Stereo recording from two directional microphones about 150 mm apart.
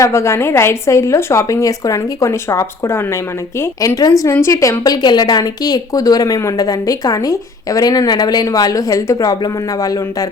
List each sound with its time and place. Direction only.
0.0 s a woman's voice: 20° left (ahead or behind)